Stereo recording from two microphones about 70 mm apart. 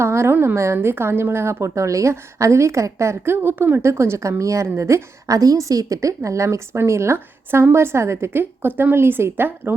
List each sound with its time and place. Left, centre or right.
0.0 s a woman's voice: right